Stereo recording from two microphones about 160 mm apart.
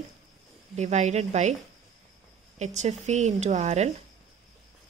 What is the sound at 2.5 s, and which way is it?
Speech, 45° right (ahead or behind).